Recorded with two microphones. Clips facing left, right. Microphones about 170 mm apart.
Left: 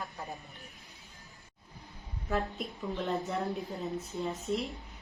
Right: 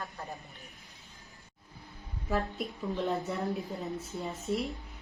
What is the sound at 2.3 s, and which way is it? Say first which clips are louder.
A woman's voice: right 1 dB; centre (ahead or behind).